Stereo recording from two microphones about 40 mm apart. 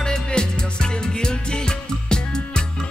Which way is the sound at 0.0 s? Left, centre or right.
Centre.